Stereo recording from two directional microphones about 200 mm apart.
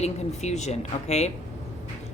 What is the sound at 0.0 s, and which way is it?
A woman's voice, 35° left (ahead or behind).